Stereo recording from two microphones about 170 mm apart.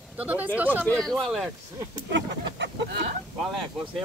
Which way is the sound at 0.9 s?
5° left (ahead or behind).